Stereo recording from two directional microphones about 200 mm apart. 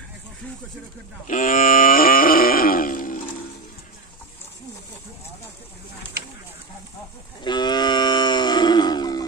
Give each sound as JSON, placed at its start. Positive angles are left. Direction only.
{"t": 1.2, "sound": "wild animals", "side_deg": 40}
{"t": 7.4, "sound": "cattle", "side_deg": 20}